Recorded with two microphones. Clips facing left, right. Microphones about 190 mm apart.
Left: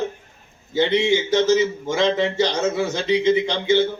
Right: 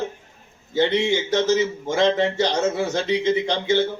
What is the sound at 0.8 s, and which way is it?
Speech, 55° right (ahead or behind).